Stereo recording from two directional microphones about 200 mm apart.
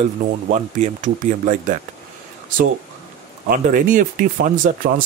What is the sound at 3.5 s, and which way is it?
Speech, 40° right (ahead or behind).